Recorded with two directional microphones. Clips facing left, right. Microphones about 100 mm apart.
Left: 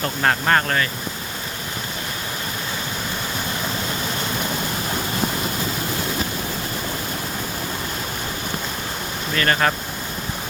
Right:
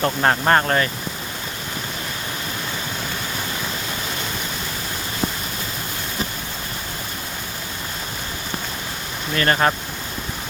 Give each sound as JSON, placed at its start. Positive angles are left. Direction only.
{"t": 0.0, "sound": "speech", "side_deg": -25}
{"t": 9.3, "sound": "speech", "side_deg": -30}